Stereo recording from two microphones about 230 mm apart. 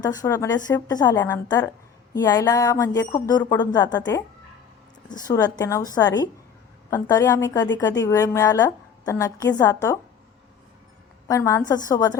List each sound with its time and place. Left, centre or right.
0.0 s a woman's voice: centre
11.3 s a woman's voice: centre